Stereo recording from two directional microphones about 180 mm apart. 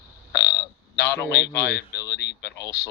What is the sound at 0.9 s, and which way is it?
A man's voice, 65° left (ahead or behind).